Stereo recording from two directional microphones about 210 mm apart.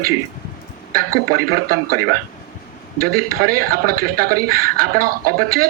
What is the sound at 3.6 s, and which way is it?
Speech, 45° right (ahead or behind).